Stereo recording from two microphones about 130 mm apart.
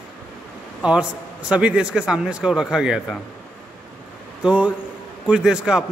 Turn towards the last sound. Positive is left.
turn(degrees=-5)  # may be behind; listen again after turning